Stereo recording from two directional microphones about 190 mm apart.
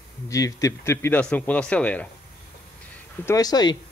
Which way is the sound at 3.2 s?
20° left (ahead or behind).